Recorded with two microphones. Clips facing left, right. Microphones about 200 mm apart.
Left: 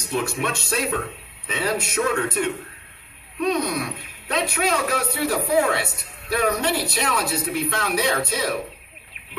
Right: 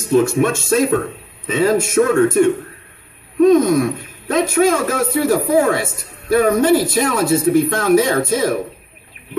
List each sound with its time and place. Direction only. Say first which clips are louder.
0.1 s speech: right 11 dB; 50° right (ahead or behind)